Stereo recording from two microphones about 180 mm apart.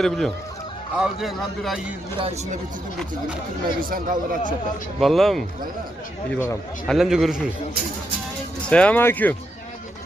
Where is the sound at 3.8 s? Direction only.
50° right (ahead or behind).